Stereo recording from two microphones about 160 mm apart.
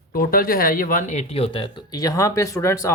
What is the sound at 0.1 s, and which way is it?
Speech, 65° left (ahead or behind).